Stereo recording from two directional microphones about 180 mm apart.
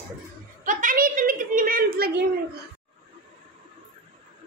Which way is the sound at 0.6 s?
45° right (ahead or behind).